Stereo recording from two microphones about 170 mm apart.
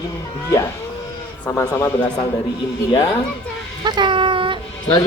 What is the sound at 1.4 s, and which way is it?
Speech, 20° left (ahead or behind).